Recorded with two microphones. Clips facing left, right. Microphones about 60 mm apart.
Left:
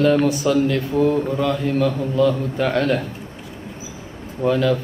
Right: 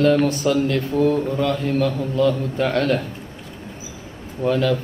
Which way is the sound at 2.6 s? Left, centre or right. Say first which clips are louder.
Even; centre.